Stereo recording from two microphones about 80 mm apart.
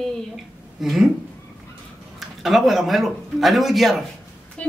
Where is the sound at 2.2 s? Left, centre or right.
Centre.